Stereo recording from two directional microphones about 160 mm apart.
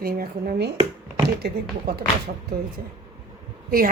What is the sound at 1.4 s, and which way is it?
Speech, 90° right.